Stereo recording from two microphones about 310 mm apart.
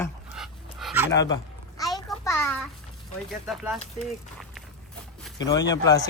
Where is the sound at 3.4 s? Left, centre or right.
Centre.